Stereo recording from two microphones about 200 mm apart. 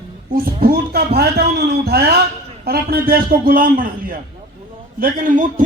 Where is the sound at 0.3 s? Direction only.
50° right (ahead or behind).